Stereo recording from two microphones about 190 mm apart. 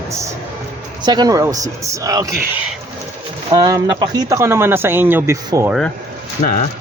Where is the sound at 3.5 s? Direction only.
20° right (ahead or behind).